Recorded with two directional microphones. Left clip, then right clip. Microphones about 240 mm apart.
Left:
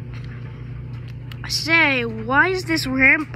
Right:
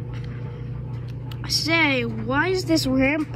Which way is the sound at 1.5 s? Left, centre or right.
Centre.